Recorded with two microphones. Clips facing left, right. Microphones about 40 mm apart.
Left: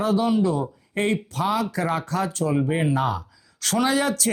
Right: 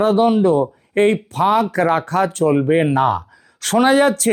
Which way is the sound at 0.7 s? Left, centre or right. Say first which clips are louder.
Right 9 dB; right.